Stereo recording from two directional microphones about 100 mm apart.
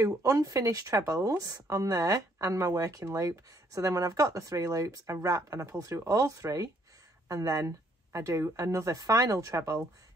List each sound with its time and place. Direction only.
0.0 s speech: 35° right (ahead or behind)